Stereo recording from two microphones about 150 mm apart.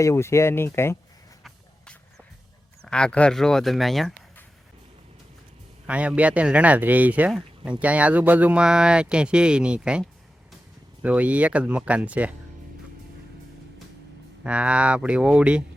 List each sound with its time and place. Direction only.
0.0 s speech: 20° left (ahead or behind)
1.5 s music: centre (ahead or behind)
2.8 s speech: 5° left (ahead or behind)
5.8 s speech: 10° right (ahead or behind)
14.4 s speech: 5° right (ahead or behind)